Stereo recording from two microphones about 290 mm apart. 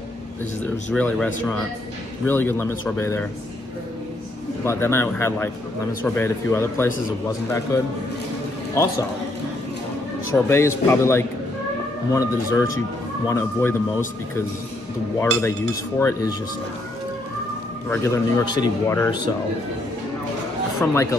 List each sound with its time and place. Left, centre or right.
0.9 s a man's voice: centre
4.6 s speech: centre
10.3 s speech: centre
17.8 s speech: centre
20.8 s speech: centre